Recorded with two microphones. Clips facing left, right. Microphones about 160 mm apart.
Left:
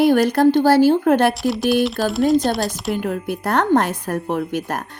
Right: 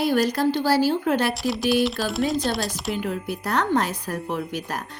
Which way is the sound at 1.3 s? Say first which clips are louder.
Left 4 dB; centre (ahead or behind).